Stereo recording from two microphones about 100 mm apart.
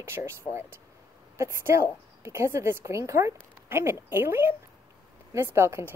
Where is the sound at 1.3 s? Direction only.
30° right (ahead or behind).